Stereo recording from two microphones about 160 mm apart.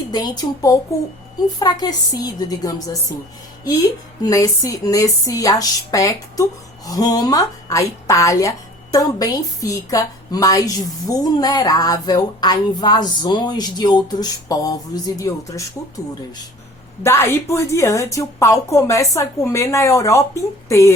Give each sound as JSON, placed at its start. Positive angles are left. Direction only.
{"t": 0.1, "sound": "speech", "side_deg": 25}
{"t": 4.2, "sound": "speech", "side_deg": 20}
{"t": 17.0, "sound": "speech", "side_deg": 15}